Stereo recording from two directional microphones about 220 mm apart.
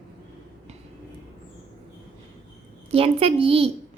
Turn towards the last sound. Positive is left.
turn(degrees=-25)  # may be behind; listen again after turning